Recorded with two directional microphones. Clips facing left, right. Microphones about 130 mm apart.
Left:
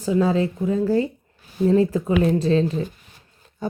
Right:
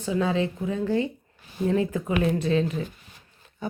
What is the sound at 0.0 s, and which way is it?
A woman's voice, 35° left (ahead or behind).